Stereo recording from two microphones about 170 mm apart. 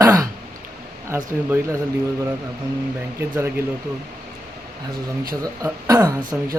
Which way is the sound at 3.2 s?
15° right (ahead or behind).